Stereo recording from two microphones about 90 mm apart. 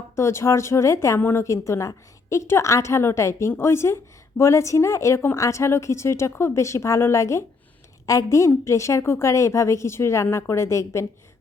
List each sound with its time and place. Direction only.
0.2 s a woman's voice: 30° left (ahead or behind)